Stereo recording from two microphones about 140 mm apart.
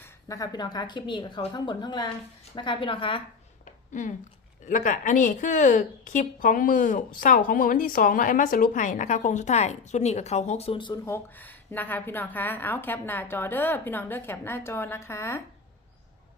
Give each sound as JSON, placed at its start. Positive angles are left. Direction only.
{"t": 0.0, "sound": "a woman's voice", "side_deg": 25}
{"t": 4.6, "sound": "a woman's voice", "side_deg": 60}
{"t": 11.0, "sound": "a woman's voice", "side_deg": 15}